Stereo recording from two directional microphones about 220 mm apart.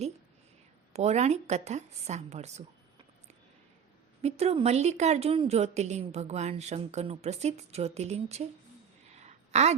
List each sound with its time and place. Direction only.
0.9 s a woman's voice: 30° right (ahead or behind)
4.2 s a woman's voice: 30° right (ahead or behind)
9.1 s a sound: 30° right (ahead or behind)